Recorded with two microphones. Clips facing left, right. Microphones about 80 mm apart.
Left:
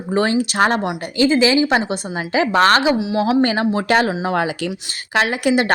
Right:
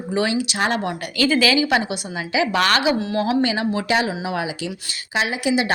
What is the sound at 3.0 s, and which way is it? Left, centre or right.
Speech, centre.